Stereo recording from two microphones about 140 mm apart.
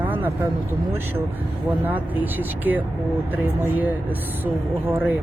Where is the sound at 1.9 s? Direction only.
10° right (ahead or behind).